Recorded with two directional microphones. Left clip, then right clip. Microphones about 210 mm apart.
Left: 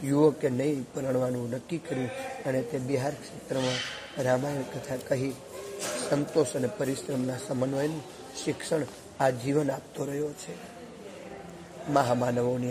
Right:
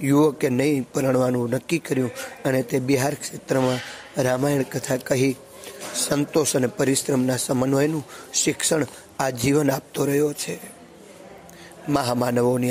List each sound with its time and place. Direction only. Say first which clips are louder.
0.0 s speech: right 5 dB; 35° right (ahead or behind)
11.9 s a man's voice: right 3 dB; 25° right (ahead or behind)